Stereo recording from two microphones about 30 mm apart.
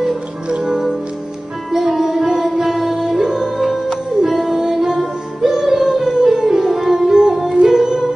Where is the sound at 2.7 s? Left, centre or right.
Centre.